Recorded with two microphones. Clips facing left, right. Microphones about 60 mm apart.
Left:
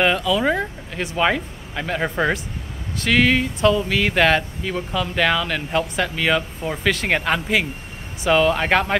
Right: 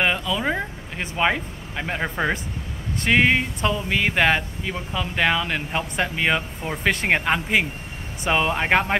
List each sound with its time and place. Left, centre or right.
0.0 s speech: centre
0.4 s speech: centre
3.1 s speech: right
6.8 s speech: right
7.1 s speech: centre